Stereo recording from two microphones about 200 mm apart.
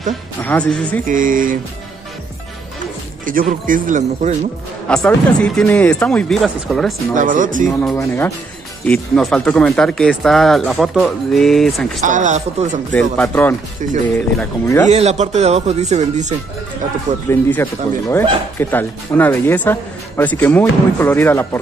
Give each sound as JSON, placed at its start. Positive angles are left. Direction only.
{"t": 0.4, "sound": "speech", "side_deg": 5}
{"t": 1.0, "sound": "speech", "side_deg": -40}
{"t": 3.3, "sound": "speech", "side_deg": -40}
{"t": 4.8, "sound": "speech", "side_deg": 5}
{"t": 7.2, "sound": "speech", "side_deg": -40}
{"t": 7.9, "sound": "speech", "side_deg": 10}
{"t": 12.1, "sound": "speech", "side_deg": -40}
{"t": 13.2, "sound": "speech", "side_deg": 10}
{"t": 14.9, "sound": "speech", "side_deg": -35}
{"t": 17.3, "sound": "speech", "side_deg": 10}